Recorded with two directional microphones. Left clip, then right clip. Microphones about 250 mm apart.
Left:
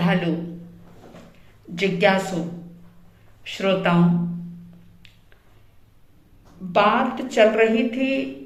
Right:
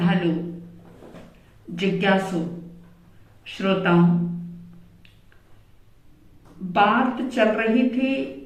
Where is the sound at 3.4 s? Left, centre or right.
Left.